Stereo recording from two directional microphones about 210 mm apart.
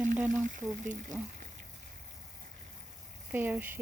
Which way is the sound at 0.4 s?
40° right (ahead or behind).